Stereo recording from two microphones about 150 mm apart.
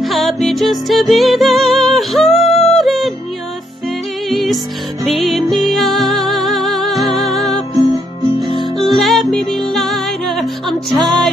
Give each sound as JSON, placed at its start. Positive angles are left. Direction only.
{"t": 0.0, "sound": "music", "side_deg": 0}
{"t": 4.3, "sound": "music", "side_deg": 0}
{"t": 7.7, "sound": "music", "side_deg": -25}
{"t": 8.7, "sound": "music", "side_deg": 0}